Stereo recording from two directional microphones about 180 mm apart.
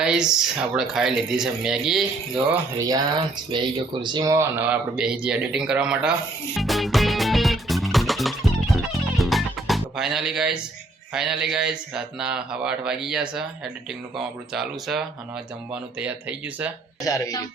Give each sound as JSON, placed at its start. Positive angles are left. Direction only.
{"t": 0.0, "sound": "speech", "side_deg": -5}
{"t": 2.5, "sound": "speech", "side_deg": -20}
{"t": 3.5, "sound": "a sound", "side_deg": -25}
{"t": 11.1, "sound": "speech", "side_deg": -5}
{"t": 14.5, "sound": "speech", "side_deg": 0}
{"t": 17.0, "sound": "speech", "side_deg": 20}